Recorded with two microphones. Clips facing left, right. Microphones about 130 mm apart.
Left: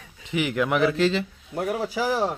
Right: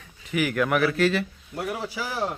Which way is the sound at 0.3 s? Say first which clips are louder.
Even; 20° left (ahead or behind).